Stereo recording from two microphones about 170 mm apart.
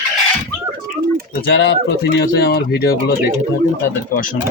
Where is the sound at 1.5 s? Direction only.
90° left; by 3.2 s 65° left (ahead or behind).